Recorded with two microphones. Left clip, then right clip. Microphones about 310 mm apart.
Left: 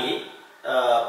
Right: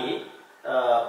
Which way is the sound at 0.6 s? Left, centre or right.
Right.